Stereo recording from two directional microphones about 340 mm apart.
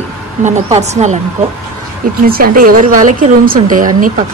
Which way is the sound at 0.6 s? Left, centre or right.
Centre.